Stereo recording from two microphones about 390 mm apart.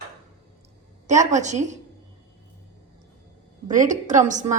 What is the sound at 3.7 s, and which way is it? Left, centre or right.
Speech, centre.